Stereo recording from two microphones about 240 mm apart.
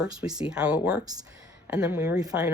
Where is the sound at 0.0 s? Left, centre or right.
Centre.